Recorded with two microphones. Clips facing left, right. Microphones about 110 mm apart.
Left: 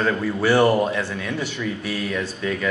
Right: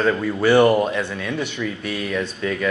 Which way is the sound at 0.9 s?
20° right (ahead or behind).